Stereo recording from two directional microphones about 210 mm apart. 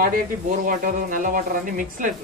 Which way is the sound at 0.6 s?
40° right (ahead or behind).